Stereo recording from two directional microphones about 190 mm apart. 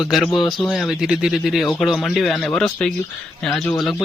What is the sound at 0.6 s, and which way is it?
Speech, centre (ahead or behind).